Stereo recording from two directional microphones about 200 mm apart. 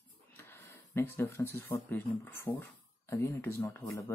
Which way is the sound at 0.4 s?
10° left (ahead or behind).